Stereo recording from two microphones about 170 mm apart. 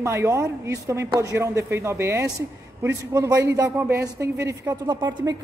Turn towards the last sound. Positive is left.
turn(degrees=-25)  # may be behind; listen again after turning